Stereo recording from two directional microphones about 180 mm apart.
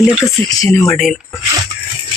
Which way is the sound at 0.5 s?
15° left (ahead or behind).